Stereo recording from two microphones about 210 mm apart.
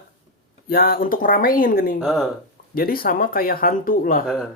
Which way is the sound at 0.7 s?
45° left (ahead or behind).